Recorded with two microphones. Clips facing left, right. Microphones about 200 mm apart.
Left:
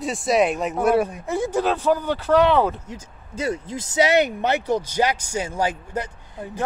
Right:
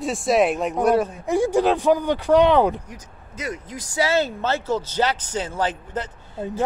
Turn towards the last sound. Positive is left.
turn(degrees=10)  # may be behind; listen again after turning